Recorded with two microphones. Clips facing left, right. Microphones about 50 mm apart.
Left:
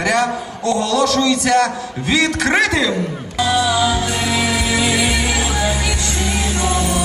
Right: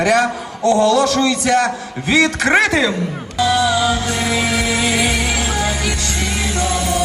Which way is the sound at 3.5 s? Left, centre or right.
Right.